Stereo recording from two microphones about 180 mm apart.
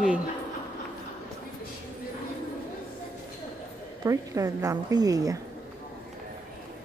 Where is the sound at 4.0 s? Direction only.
20° right (ahead or behind).